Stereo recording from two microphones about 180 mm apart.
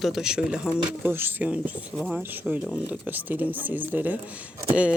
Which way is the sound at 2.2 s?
10° right (ahead or behind).